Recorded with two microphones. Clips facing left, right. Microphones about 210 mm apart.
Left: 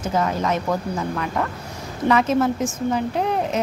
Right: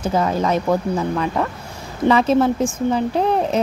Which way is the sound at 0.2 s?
30° right (ahead or behind).